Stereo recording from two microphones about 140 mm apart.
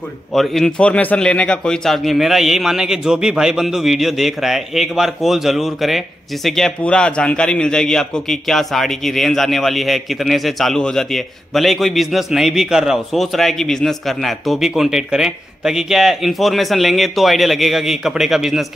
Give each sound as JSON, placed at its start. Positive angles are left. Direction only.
{"t": 0.3, "sound": "a man's voice", "side_deg": 0}